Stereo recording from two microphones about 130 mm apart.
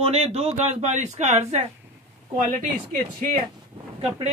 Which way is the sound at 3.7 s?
40° right (ahead or behind).